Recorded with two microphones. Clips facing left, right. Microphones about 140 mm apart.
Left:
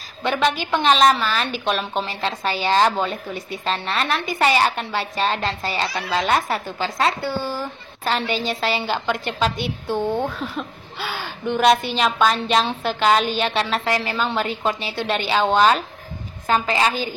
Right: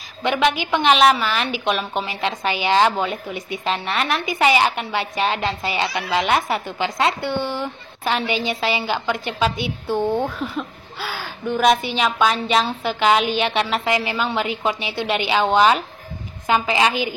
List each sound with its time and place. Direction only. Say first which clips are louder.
0.2 s a woman's voice: right 1 dB; 15° right (ahead or behind)
5.9 s a woman's voice: right 2 dB; centre (ahead or behind)
6.2 s a woman's voice: right 1 dB; 15° right (ahead or behind)
8.2 s a woman's voice: right 1 dB; centre (ahead or behind)
10.4 s a woman's voice: right 2 dB; centre (ahead or behind)